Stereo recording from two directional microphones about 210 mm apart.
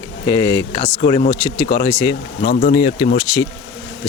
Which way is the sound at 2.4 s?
50° left (ahead or behind).